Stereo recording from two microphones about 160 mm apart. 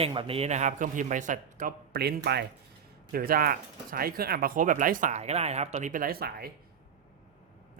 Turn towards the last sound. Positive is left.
turn(degrees=-75)  # may be behind; listen again after turning